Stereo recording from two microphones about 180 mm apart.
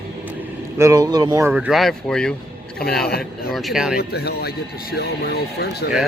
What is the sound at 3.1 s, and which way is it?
Speech, 60° left (ahead or behind).